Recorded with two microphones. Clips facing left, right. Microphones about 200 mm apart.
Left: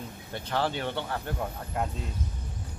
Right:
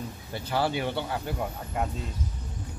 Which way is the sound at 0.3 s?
10° right (ahead or behind).